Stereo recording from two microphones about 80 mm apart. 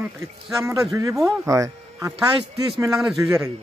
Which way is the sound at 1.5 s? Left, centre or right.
Right.